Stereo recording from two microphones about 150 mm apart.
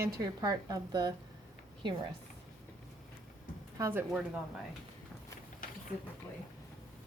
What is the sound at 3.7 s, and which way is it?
Speech, 20° right (ahead or behind).